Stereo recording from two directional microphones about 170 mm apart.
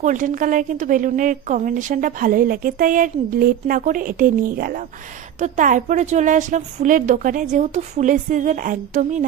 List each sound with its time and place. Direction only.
0.0 s a woman's voice: 50° right (ahead or behind)